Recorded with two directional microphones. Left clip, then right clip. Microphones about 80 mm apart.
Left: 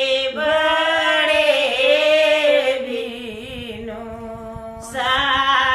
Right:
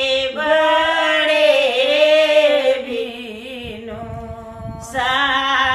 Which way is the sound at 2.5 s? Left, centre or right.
Left.